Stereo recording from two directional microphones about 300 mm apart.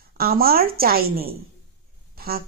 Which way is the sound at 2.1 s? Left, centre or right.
Right.